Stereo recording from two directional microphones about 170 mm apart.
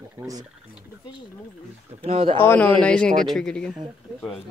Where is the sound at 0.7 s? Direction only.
25° left (ahead or behind).